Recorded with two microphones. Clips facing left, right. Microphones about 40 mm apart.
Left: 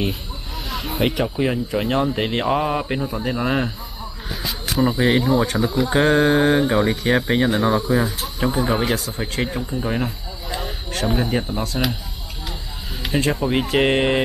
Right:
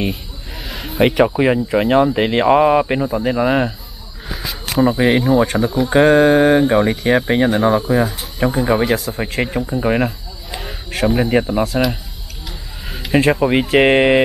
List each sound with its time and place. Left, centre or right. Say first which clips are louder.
0.0 s a sound: right 2 dB; centre
1.0 s speech: right 8 dB; centre
9.7 s speech: right 7 dB; right
10.6 s a sound: right 7 dB; centre
11.1 s speech: right 7 dB; centre
13.1 s speech: right 7 dB; right
13.6 s speech: right 4 dB; centre